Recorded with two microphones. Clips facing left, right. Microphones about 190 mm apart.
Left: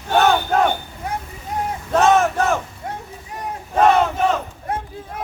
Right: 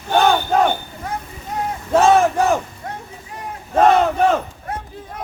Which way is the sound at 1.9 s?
10° right (ahead or behind).